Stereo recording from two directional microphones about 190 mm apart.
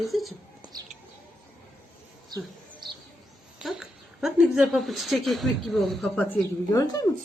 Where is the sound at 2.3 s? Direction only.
20° right (ahead or behind).